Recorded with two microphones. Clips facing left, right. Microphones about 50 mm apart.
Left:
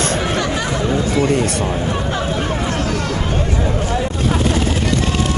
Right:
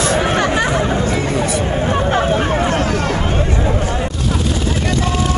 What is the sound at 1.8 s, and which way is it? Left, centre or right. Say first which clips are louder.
Hubbub: right 5 dB; right.